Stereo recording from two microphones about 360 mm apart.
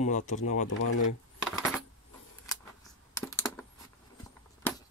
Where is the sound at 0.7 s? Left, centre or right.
Left.